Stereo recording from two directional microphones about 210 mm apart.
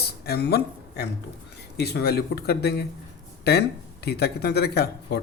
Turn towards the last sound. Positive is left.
turn(degrees=50)  # may be behind; listen again after turning